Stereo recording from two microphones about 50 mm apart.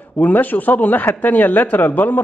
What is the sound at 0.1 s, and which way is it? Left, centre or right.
Speech, left.